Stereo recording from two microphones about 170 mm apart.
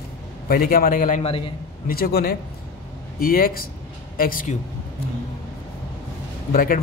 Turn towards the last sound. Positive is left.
turn(degrees=55)  # may be behind; listen again after turning